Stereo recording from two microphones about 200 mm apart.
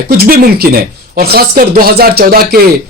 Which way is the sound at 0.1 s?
45° right (ahead or behind).